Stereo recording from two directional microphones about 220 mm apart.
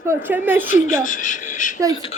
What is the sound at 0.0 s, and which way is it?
Speech, 10° right (ahead or behind).